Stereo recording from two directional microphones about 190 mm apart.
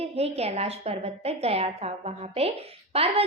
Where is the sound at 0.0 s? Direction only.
35° right (ahead or behind).